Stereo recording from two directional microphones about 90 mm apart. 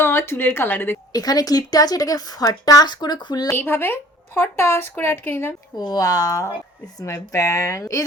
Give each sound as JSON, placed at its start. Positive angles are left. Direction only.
{"t": 0.0, "sound": "a woman's voice", "side_deg": 25}
{"t": 1.1, "sound": "speech", "side_deg": 45}
{"t": 3.5, "sound": "a woman's voice", "side_deg": 25}
{"t": 5.7, "sound": "speech", "side_deg": 45}